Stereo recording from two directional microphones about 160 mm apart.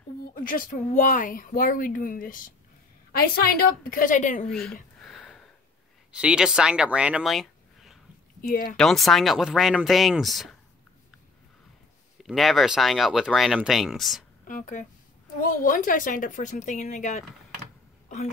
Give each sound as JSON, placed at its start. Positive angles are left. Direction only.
{"t": 0.3, "sound": "speech", "side_deg": 60}
{"t": 4.5, "sound": "speech", "side_deg": 5}
{"t": 5.0, "sound": "a sound", "side_deg": 0}
{"t": 6.1, "sound": "speech", "side_deg": -5}
{"t": 8.4, "sound": "speech", "side_deg": 65}
{"t": 8.7, "sound": "speech", "side_deg": 0}
{"t": 12.2, "sound": "speech", "side_deg": 0}
{"t": 14.5, "sound": "speech", "side_deg": 55}
{"t": 18.0, "sound": "throat clearing", "side_deg": 50}